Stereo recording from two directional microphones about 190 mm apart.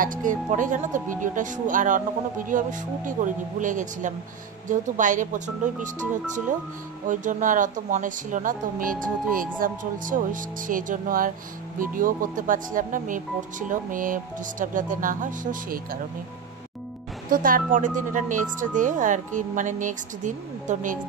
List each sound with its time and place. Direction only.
0.0 s speech: 45° right (ahead or behind)
17.3 s speech: 45° right (ahead or behind)